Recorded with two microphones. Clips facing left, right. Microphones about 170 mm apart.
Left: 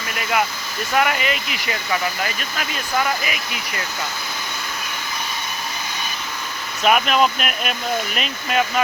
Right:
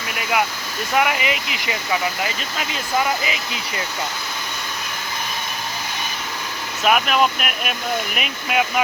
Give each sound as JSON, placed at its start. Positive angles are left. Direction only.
{"t": 0.9, "sound": "speech", "side_deg": -15}
{"t": 6.8, "sound": "speech", "side_deg": -5}